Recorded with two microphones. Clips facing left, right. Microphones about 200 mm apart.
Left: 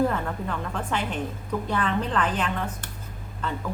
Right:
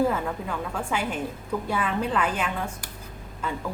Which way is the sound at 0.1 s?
5° right (ahead or behind).